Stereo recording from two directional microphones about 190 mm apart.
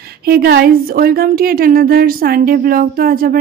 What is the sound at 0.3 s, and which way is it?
A woman's voice, 55° right (ahead or behind).